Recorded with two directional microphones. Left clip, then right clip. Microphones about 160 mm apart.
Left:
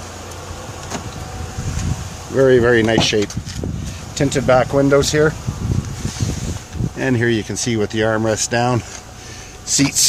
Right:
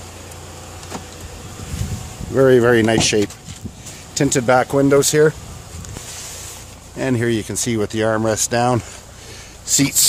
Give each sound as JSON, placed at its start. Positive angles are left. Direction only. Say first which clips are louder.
{"t": 2.3, "sound": "speech", "louder": "even", "side_deg": -35}
{"t": 7.0, "sound": "speech", "louder": "left 2 dB", "side_deg": -35}